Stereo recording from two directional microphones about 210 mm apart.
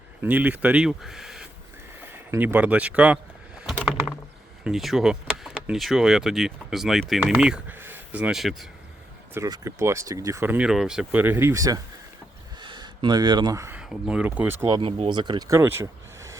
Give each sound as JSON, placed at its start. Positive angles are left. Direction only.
{"t": 0.2, "sound": "speech", "side_deg": -10}
{"t": 3.7, "sound": "typing", "side_deg": 0}
{"t": 4.6, "sound": "speech", "side_deg": 0}
{"t": 9.3, "sound": "speech", "side_deg": -15}
{"t": 14.8, "sound": "speech", "side_deg": -25}